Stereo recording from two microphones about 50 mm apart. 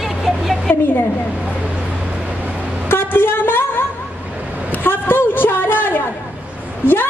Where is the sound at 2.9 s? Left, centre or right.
Left.